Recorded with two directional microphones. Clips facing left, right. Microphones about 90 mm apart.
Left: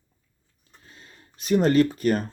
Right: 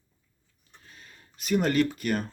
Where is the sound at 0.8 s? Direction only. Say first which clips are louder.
Left 2 dB; 30° left (ahead or behind).